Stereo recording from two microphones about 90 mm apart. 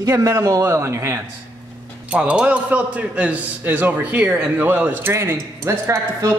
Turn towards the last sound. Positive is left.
turn(degrees=-35)  # may be behind; listen again after turning